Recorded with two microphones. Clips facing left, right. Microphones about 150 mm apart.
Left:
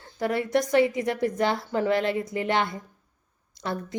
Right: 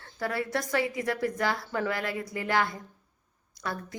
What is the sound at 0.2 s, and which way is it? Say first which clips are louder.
A woman's voice: left 6 dB; 20° left (ahead or behind).